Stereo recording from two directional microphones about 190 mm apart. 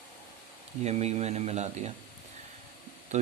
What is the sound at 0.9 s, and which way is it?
Speech, 35° right (ahead or behind).